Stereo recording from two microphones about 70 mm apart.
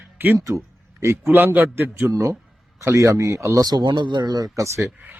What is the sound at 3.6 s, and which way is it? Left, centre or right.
Speech, right.